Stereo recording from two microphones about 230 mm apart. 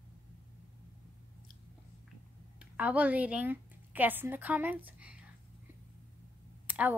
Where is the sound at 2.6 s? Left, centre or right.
Centre.